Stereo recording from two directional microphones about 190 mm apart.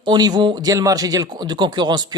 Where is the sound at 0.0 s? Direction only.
20° right (ahead or behind).